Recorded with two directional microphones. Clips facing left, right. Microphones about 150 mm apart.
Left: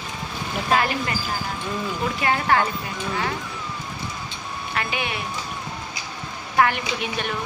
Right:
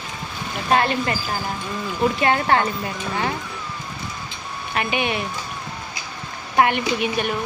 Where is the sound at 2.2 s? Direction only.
30° right (ahead or behind).